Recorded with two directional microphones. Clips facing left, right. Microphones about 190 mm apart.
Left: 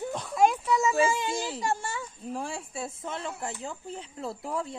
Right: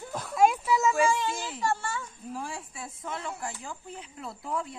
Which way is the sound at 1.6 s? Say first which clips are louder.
Even; 15° left (ahead or behind).